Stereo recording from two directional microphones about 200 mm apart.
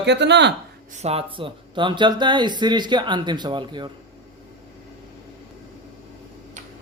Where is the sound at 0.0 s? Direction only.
60° right (ahead or behind).